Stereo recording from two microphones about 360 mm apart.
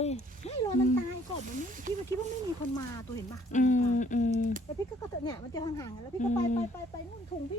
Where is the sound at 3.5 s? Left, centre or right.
Left.